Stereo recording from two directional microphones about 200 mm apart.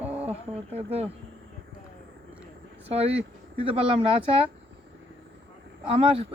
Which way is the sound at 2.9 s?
30° right (ahead or behind).